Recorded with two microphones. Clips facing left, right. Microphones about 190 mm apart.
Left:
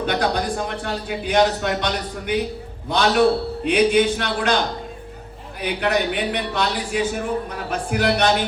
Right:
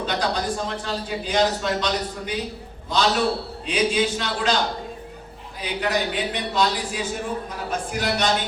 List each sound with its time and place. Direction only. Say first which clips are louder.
0.0 s a man's voice: left 3 dB; 55° left (ahead or behind)
5.6 s a man's voice: left 3 dB; 60° left (ahead or behind)